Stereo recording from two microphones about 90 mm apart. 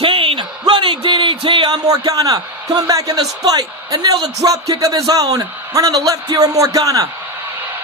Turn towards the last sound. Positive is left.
turn(degrees=-40)  # may be behind; listen again after turning